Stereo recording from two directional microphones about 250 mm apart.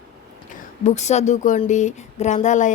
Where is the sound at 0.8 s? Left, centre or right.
Left.